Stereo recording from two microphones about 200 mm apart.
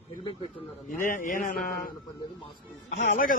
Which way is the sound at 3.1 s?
45° left (ahead or behind).